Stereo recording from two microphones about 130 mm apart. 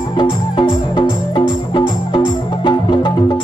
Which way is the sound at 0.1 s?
35° left (ahead or behind).